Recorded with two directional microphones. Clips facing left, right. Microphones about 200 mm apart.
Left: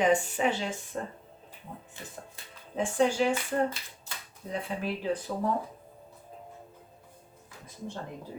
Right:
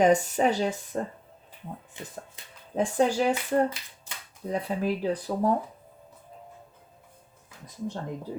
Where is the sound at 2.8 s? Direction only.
40° right (ahead or behind).